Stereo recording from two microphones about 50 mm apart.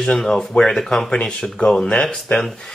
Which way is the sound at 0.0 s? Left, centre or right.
Centre.